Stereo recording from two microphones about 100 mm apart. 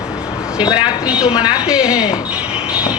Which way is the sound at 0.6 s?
50° left (ahead or behind).